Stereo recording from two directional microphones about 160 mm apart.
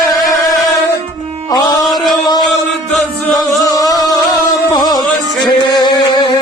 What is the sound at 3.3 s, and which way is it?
Music, 20° left (ahead or behind).